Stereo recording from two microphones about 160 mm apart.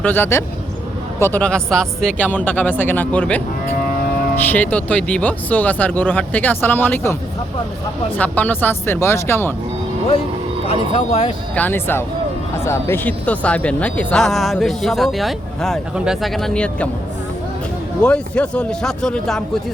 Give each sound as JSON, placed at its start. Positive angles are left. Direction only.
{"t": 0.0, "sound": "speech", "side_deg": 15}
{"t": 10.7, "sound": "speech", "side_deg": 35}
{"t": 11.5, "sound": "speech", "side_deg": 10}
{"t": 18.0, "sound": "speech", "side_deg": 5}